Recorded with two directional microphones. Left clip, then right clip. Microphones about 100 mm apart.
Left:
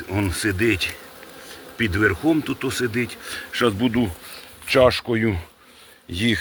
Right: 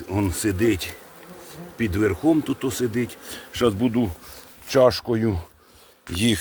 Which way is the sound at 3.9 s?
10° right (ahead or behind).